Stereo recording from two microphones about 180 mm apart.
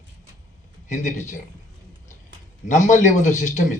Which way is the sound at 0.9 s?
45° left (ahead or behind).